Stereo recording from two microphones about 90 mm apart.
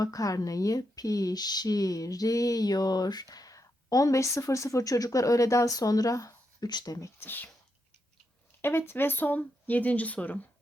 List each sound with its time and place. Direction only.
0.0 s speech: 40° left (ahead or behind)
7.2 s speech: 20° left (ahead or behind)
8.6 s speech: 25° left (ahead or behind)